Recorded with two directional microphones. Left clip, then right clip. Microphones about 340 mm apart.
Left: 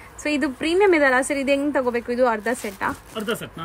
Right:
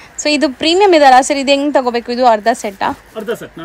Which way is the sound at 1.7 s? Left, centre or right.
Centre.